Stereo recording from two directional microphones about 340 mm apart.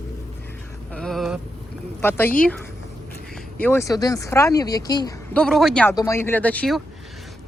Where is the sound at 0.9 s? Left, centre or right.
Centre.